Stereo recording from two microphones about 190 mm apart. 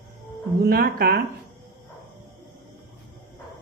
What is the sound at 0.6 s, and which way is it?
Speech, 50° right (ahead or behind).